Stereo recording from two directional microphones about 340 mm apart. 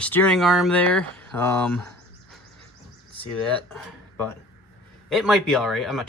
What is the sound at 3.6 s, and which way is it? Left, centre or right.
Speech, centre.